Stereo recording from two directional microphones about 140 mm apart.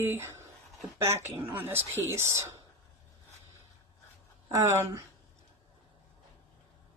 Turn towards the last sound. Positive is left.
turn(degrees=-20)  # may be behind; listen again after turning